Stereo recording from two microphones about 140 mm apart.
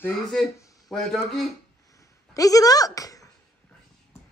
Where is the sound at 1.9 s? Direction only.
25° left (ahead or behind).